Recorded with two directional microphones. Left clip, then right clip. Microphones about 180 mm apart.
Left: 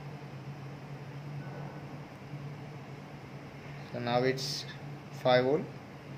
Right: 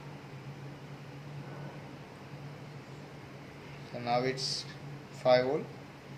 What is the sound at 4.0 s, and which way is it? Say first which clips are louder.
Speech: left 1 dB; 40° left (ahead or behind).